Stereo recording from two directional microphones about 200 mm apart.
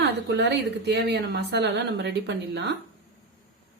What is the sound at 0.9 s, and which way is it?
A woman's voice, 55° right (ahead or behind).